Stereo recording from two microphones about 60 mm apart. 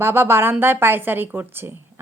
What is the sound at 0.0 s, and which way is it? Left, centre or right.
A woman's voice, right.